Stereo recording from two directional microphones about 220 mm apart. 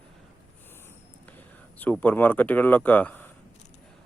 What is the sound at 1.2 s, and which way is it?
Speech, 5° left (ahead or behind).